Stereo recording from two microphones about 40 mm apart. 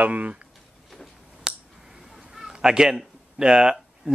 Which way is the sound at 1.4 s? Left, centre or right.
Centre.